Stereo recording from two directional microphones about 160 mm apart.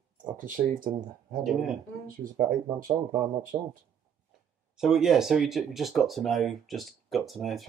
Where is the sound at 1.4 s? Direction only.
Centre (ahead or behind).